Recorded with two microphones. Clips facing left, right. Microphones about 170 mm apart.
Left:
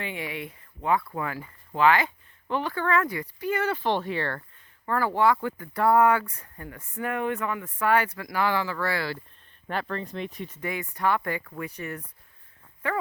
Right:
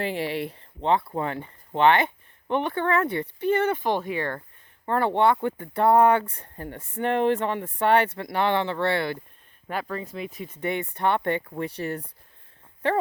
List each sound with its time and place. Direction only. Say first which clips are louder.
0.0 s speech: right 6 dB; 35° right (ahead or behind); by 4.4 s 15° right (ahead or behind)
4.9 s speech: right 2 dB; 25° right (ahead or behind)
9.6 s speech: even; 10° right (ahead or behind)
10.6 s speech: right 3 dB; 30° right (ahead or behind)